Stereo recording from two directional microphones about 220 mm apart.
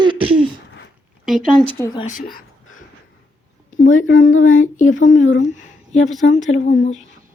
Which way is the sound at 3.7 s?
35° left (ahead or behind).